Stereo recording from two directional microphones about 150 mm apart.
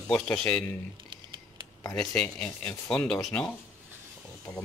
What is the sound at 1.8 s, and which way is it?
Speech, 25° left (ahead or behind).